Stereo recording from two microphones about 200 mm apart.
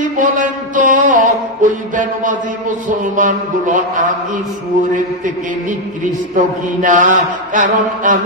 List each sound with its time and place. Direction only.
0.0 s music: 40° right (ahead or behind)
3.0 s mantra: 40° right (ahead or behind)